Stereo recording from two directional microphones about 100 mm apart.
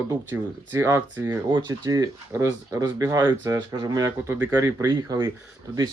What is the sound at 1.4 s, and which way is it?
Speech, 50° right (ahead or behind).